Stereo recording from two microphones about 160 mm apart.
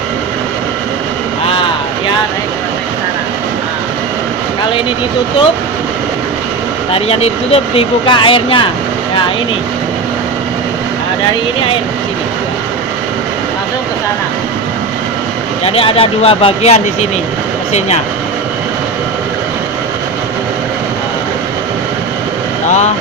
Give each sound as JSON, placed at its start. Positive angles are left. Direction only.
{"t": 1.5, "sound": "vehicle", "side_deg": 30}
{"t": 6.9, "sound": "speech", "side_deg": 40}
{"t": 15.6, "sound": "speech", "side_deg": 35}